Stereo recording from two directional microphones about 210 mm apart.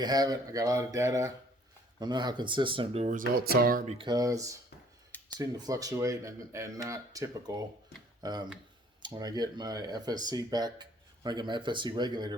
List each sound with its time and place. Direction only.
0.0 s speech: 20° right (ahead or behind); by 3.9 s 40° right (ahead or behind)
3.9 s speech: 20° right (ahead or behind)